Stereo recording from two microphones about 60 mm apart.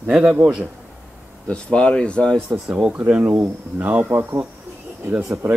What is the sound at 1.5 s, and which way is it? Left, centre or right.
Speech, centre.